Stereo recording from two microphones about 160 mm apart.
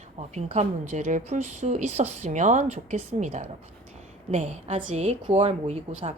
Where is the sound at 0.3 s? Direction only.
45° right (ahead or behind).